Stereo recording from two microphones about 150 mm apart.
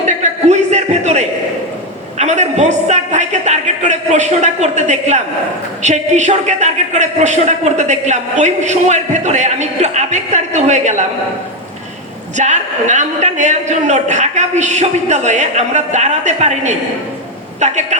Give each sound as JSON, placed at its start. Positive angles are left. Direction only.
{"t": 0.0, "sound": "a sound", "side_deg": -50}
{"t": 2.1, "sound": "a woman's voice", "side_deg": -50}
{"t": 12.4, "sound": "a woman's voice", "side_deg": -50}